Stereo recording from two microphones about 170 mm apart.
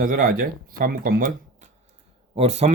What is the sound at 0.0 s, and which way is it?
Speech, 55° right (ahead or behind).